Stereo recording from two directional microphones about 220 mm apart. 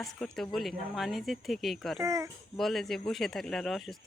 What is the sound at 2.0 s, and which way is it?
Speech, 15° right (ahead or behind).